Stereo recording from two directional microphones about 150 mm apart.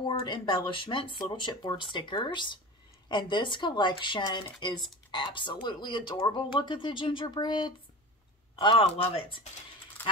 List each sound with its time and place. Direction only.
0.0 s speech: 30° left (ahead or behind)